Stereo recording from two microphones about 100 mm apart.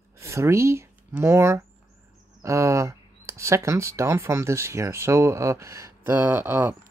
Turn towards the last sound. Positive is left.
turn(degrees=-20)  # may be behind; listen again after turning